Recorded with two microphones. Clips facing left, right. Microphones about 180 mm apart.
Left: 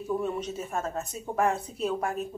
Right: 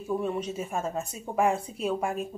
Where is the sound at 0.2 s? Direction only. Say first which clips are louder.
Right 1 dB; 10° right (ahead or behind).